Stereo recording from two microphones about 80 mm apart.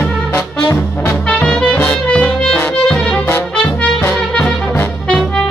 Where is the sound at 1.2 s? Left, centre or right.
Centre.